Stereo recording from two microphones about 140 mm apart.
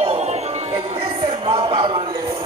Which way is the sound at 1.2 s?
35° right (ahead or behind).